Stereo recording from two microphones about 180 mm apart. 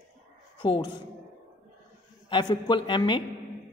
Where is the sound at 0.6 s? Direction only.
25° left (ahead or behind).